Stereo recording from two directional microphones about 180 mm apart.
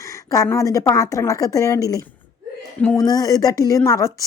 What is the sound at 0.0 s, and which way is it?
Speech, 20° left (ahead or behind).